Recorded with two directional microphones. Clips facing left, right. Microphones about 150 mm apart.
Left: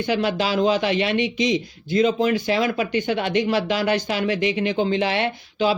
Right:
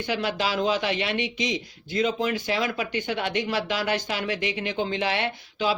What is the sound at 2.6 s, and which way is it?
Speech, 25° left (ahead or behind).